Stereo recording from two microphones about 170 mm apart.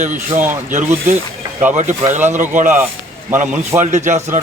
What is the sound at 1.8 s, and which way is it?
Speech, 15° right (ahead or behind).